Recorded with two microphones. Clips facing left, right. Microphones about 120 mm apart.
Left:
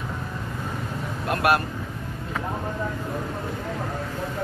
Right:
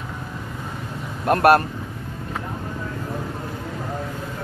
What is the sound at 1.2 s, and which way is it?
Speech, 45° right (ahead or behind).